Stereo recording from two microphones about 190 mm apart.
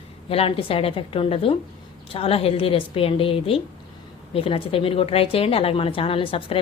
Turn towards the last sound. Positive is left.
turn(degrees=30)  # may be behind; listen again after turning